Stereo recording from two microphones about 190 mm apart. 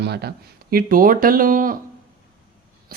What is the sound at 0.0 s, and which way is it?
Speech, 60° right (ahead or behind).